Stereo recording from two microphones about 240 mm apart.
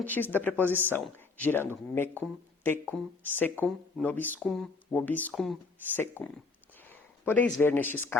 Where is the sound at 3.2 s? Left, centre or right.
Centre.